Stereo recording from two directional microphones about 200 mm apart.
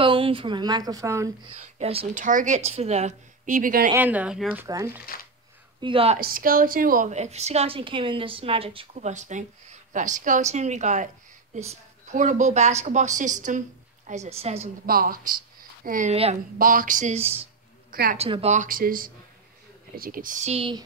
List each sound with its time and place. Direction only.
0.0 s speech: 25° right (ahead or behind)
1.5 s a woman's voice: 30° right (ahead or behind)
3.9 s speech: 10° right (ahead or behind)
5.8 s a woman's voice: 25° right (ahead or behind)
6.1 s a woman's voice: 45° right (ahead or behind)
14.9 s a woman's voice: 45° right (ahead or behind)
16.5 s a woman's voice: 45° right (ahead or behind); by 20.8 s 25° right (ahead or behind)